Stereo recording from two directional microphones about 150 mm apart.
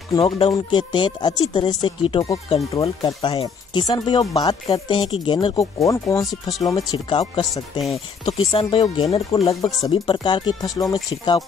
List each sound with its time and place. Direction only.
0.5 s speech: 30° left (ahead or behind)
4.6 s speech: 35° left (ahead or behind)
5.8 s speech: 20° left (ahead or behind)
8.3 s speech: 40° left (ahead or behind)
8.6 s speech: 30° left (ahead or behind)